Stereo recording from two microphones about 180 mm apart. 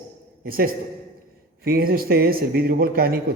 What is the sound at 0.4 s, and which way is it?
A man's voice, 55° right (ahead or behind).